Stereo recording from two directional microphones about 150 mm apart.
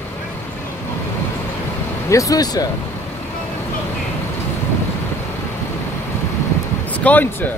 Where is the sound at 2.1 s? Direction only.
20° left (ahead or behind).